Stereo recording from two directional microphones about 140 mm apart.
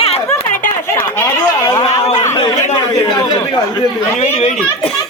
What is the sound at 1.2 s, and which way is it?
Speech, 20° left (ahead or behind).